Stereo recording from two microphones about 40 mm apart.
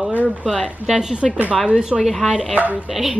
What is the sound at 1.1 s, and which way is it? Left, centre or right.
Speech, right.